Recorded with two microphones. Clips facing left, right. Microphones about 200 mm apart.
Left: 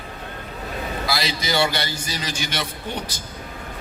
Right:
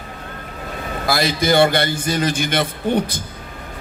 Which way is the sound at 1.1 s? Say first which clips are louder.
Right 10 dB; 50° right (ahead or behind).